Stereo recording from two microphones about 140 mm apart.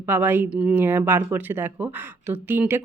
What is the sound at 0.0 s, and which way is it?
Speech, 15° right (ahead or behind).